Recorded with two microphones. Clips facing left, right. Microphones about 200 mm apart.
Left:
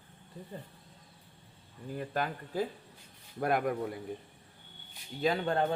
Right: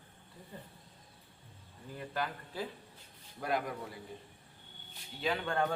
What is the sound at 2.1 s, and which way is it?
A man's voice, 45° left (ahead or behind).